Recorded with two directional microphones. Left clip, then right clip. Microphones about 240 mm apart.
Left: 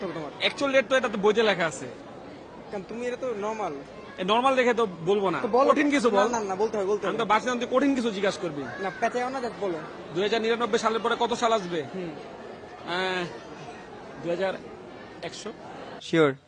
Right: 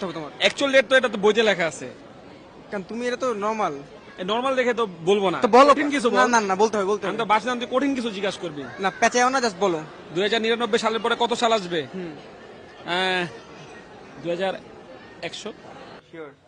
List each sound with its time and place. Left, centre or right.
0.0 s a man's voice: right
2.7 s a man's voice: right
4.2 s a man's voice: centre
5.0 s a man's voice: right
5.7 s a man's voice: centre
6.1 s speech: right
7.0 s speech: right
8.8 s speech: right
10.2 s a man's voice: right
12.9 s a man's voice: right